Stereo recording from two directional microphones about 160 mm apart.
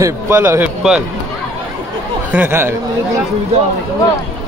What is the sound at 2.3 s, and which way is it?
Speech, 15° right (ahead or behind).